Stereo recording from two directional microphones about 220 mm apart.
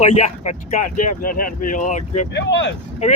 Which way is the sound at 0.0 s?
30° left (ahead or behind).